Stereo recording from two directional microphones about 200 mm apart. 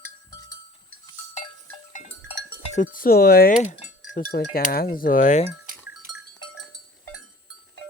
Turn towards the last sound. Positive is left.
turn(degrees=0)  # may be behind; listen again after turning